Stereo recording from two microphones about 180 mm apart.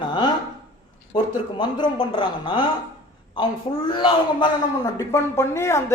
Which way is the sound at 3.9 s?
25° left (ahead or behind).